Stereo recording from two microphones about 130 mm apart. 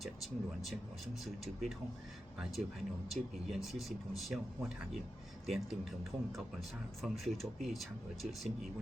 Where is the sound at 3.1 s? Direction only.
Centre (ahead or behind).